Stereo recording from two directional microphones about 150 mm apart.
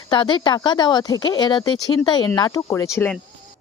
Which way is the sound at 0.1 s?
30° left (ahead or behind).